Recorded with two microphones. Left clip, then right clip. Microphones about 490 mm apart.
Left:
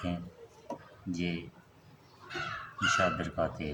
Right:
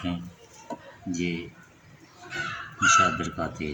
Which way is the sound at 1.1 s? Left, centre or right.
Left.